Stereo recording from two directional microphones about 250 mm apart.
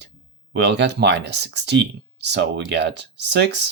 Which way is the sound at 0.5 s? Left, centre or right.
Right.